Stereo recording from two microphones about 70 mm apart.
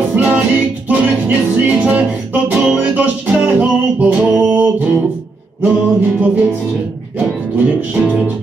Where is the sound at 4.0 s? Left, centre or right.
Right.